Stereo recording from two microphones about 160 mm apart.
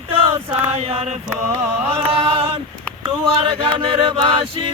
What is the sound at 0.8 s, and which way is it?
Chant, 40° right (ahead or behind).